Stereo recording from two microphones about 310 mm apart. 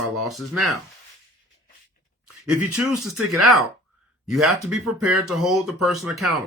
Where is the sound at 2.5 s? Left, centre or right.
Centre.